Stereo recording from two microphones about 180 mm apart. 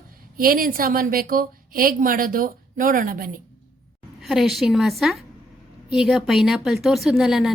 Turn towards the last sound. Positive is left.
turn(degrees=0)  # may be behind; listen again after turning